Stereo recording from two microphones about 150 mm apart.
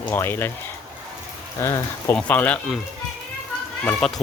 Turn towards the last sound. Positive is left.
turn(degrees=5)  # may be behind; listen again after turning